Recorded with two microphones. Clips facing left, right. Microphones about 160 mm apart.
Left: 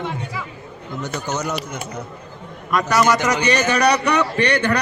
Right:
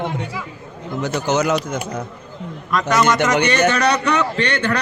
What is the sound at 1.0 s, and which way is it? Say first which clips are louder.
Speech: right 7 dB; 90° right.